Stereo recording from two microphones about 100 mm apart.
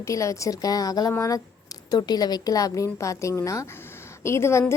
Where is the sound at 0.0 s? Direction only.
30° left (ahead or behind).